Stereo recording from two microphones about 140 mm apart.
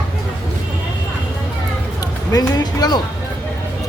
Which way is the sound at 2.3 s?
25° left (ahead or behind).